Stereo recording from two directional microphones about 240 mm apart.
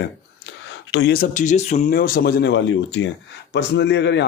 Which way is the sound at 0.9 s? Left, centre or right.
Left.